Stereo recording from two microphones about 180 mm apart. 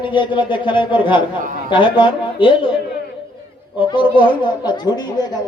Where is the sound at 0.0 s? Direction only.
25° left (ahead or behind).